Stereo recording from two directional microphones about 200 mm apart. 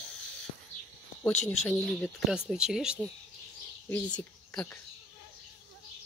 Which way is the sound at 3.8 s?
10° left (ahead or behind).